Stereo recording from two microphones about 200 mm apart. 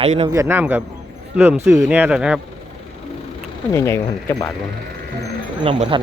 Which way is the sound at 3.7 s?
15° left (ahead or behind).